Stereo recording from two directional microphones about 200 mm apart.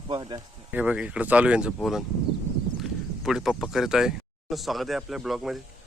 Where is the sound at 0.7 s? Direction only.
5° right (ahead or behind).